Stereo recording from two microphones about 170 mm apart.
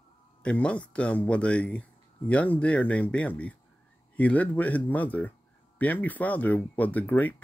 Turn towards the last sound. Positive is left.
turn(degrees=10)  # may be behind; listen again after turning